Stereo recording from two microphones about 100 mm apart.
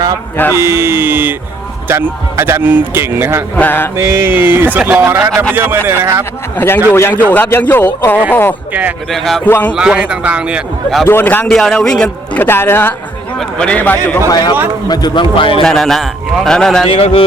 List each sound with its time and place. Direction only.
0.5 s a man's voice: 25° right (ahead or behind)
3.5 s a man's voice: 20° left (ahead or behind)
3.9 s a man's voice: 25° right (ahead or behind)
6.6 s a man's voice: 20° left (ahead or behind)
9.1 s a man's voice: centre (ahead or behind)
9.4 s a man's voice: 15° left (ahead or behind)
9.7 s speech: 10° right (ahead or behind)
11.0 s a man's voice: 20° left (ahead or behind)
11.4 s a man's voice: 5° left (ahead or behind); by 12.9 s 25° left (ahead or behind)
13.6 s a man's voice: 15° left (ahead or behind)
14.3 s a man's voice: 40° left (ahead or behind); by 15.6 s 60° left (ahead or behind)
15.6 s a man's voice: centre (ahead or behind)
16.9 s speech: 75° left (ahead or behind)